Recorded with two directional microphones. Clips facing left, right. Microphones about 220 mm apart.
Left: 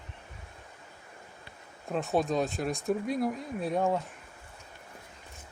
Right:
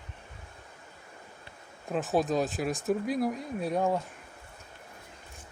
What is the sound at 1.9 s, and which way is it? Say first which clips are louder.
Speech: right 1 dB; centre (ahead or behind).